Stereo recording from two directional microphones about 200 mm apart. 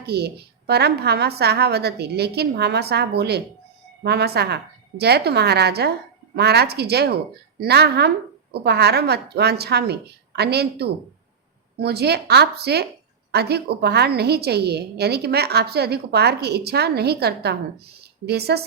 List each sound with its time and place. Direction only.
0.0 s a woman's voice: 55° right (ahead or behind)